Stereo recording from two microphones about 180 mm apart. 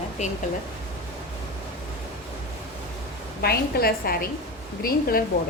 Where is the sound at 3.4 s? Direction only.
60° left (ahead or behind).